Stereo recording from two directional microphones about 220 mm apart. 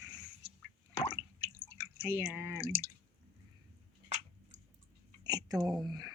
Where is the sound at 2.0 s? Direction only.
10° right (ahead or behind).